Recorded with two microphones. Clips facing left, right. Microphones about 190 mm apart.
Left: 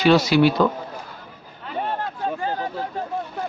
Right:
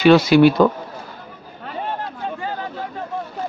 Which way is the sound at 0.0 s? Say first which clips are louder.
Right 4 dB; 55° right (ahead or behind).